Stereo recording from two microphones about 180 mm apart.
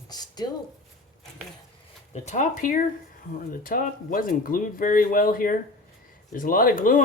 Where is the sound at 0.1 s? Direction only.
20° left (ahead or behind).